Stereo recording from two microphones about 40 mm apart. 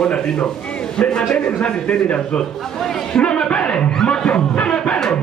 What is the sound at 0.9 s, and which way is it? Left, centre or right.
Speech, centre.